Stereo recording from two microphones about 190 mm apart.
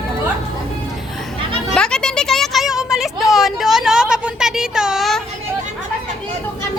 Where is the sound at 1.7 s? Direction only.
5° left (ahead or behind).